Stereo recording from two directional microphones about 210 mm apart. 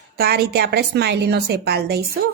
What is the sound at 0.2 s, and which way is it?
A woman's voice, 45° right (ahead or behind).